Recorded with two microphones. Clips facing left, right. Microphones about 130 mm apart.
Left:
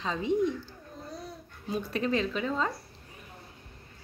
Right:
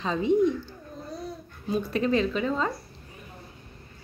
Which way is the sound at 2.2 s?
50° right (ahead or behind).